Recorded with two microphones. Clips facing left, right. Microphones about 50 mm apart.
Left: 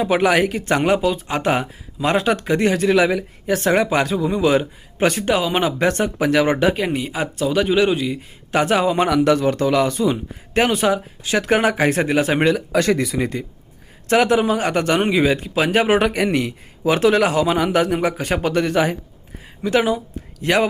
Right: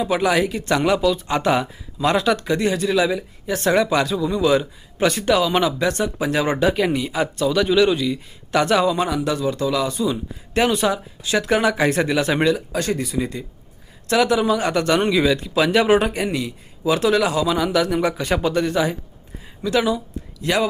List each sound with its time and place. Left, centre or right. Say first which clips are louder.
0.0 s speech: left 2 dB; left
0.6 s a man's voice: left 1 dB; left
5.8 s a man's voice: left 3 dB; left
6.7 s a man's voice: right 2 dB; centre
9.0 s a man's voice: left 6 dB; left
12.5 s speech: left 5 dB; left
14.1 s a man's voice: left 2 dB; left
16.0 s a man's voice: left 3 dB; left